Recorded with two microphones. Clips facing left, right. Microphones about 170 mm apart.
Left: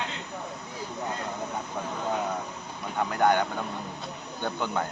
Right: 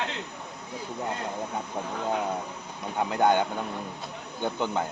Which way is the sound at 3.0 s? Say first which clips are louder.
Right 1 dB; 20° right (ahead or behind).